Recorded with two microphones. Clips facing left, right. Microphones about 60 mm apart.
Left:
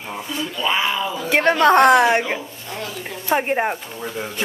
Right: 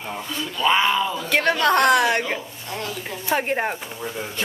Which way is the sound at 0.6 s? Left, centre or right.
Centre.